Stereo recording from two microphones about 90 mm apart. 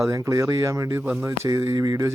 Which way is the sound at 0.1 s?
35° right (ahead or behind).